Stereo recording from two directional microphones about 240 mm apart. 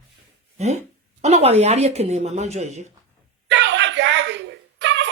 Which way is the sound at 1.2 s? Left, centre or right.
Right.